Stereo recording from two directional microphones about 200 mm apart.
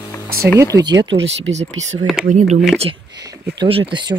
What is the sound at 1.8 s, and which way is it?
Speech, 35° right (ahead or behind).